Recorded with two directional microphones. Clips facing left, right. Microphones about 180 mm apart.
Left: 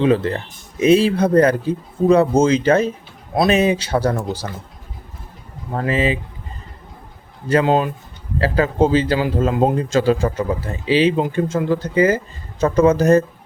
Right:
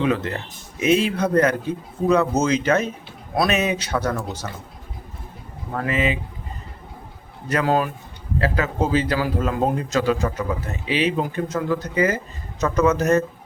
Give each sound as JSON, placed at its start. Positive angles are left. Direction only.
{"t": 0.0, "sound": "a man's voice", "side_deg": 30}
{"t": 5.7, "sound": "a man's voice", "side_deg": 30}
{"t": 7.4, "sound": "a man's voice", "side_deg": 25}